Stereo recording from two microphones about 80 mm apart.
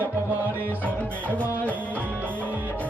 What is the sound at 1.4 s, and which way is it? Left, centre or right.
Music, right.